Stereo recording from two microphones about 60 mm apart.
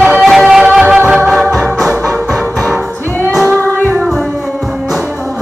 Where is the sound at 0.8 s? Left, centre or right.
Right.